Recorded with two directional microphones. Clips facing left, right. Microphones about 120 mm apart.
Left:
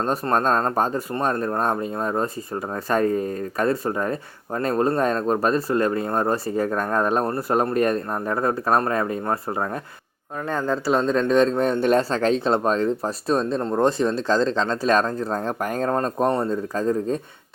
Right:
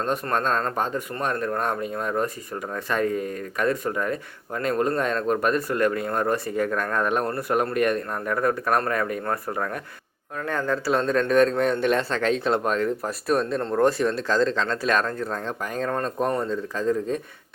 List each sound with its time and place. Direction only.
0.0 s a man's voice: 35° left (ahead or behind)
11.6 s speech: 35° left (ahead or behind)
13.6 s speech: 15° left (ahead or behind); by 15.9 s 45° left (ahead or behind)
15.9 s speech: 35° left (ahead or behind)